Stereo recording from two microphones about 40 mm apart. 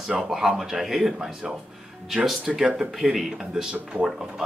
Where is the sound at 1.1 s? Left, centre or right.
Centre.